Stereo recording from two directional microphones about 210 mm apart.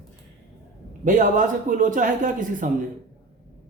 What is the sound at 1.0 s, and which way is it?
Speech, 40° right (ahead or behind).